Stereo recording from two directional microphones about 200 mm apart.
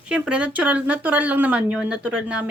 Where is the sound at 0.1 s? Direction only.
5° right (ahead or behind).